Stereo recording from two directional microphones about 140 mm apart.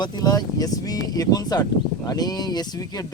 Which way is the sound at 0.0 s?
30° left (ahead or behind).